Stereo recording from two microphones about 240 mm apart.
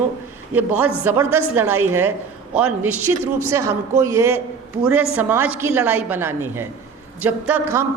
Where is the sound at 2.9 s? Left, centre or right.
Right.